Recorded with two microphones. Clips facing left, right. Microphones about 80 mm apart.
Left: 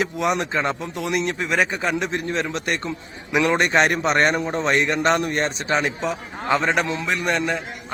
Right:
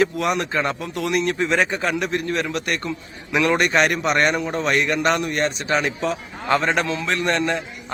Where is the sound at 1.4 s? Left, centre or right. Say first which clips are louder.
Right 2 dB; centre.